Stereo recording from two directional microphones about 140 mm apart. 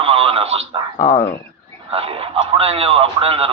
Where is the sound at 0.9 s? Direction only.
50° left (ahead or behind).